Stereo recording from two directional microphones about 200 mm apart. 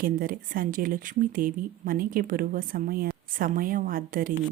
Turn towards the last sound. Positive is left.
turn(degrees=-45)  # may be behind; listen again after turning